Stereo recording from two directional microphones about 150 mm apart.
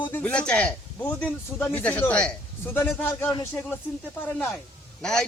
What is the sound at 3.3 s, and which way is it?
Speech, 25° left (ahead or behind).